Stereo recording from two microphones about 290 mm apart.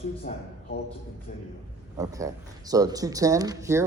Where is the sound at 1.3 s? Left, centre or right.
Left.